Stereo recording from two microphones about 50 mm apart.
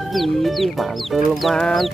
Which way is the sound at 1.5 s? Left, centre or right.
Centre.